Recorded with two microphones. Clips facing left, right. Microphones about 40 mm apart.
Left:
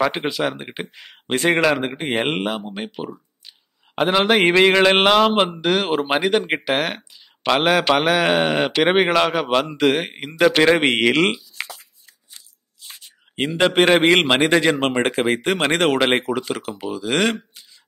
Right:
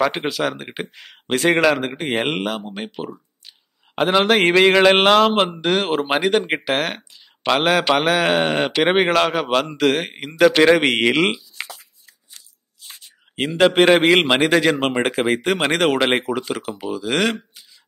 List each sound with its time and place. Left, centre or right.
0.0 s a man's voice: centre
4.3 s speech: centre
4.6 s speech: centre
5.6 s speech: right
6.3 s speech: centre
6.7 s speech: centre
7.0 s speech: centre
9.4 s speech: centre
10.6 s speech: centre
11.1 s a sound: centre
13.4 s speech: centre